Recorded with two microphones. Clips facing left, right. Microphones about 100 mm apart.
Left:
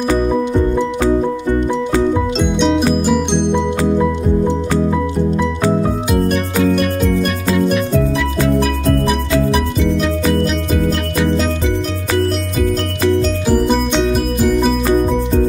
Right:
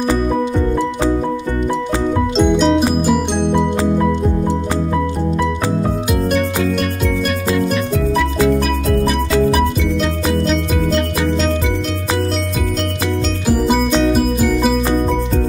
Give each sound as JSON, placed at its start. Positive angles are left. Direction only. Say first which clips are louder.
{"t": 2.3, "sound": "music", "louder": "right 2 dB", "side_deg": 0}
{"t": 13.5, "sound": "music", "louder": "right 1 dB", "side_deg": 0}